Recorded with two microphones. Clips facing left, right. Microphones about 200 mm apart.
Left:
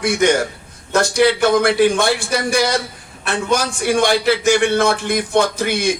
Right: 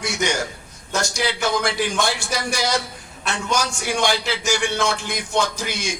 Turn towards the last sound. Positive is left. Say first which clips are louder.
# left 9 dB
turn(degrees=60)  # may be behind; listen again after turning